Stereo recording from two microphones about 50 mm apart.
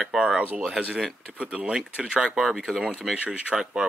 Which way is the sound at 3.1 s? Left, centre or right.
Right.